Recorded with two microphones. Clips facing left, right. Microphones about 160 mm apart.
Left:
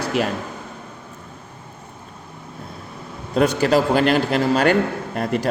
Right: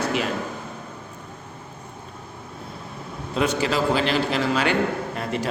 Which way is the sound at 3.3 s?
45° left (ahead or behind).